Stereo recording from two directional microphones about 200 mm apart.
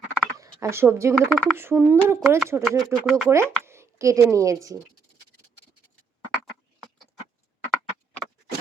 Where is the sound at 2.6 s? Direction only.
Centre (ahead or behind).